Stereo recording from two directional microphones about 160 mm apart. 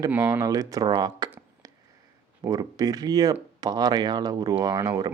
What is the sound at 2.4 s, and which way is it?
Speech, 25° right (ahead or behind).